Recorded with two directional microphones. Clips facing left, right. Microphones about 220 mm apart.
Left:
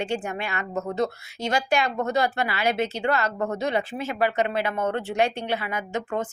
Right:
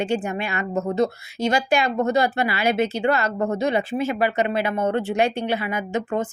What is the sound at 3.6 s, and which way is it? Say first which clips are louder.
Speech: right 6 dB; 5° right (ahead or behind).